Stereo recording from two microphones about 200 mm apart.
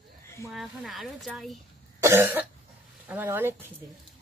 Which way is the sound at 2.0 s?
10° right (ahead or behind).